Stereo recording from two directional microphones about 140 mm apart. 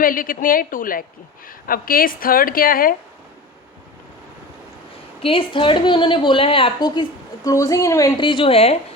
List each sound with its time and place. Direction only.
0.0 s a woman's voice: 85° left
5.2 s a woman's voice: 40° left (ahead or behind); by 8.1 s 25° left (ahead or behind)
8.2 s a woman's voice: 35° left (ahead or behind)